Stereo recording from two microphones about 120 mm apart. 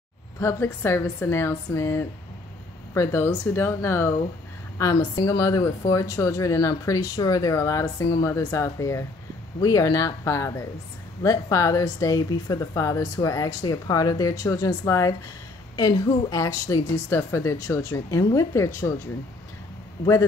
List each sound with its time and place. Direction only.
0.4 s a woman's voice: 20° left (ahead or behind)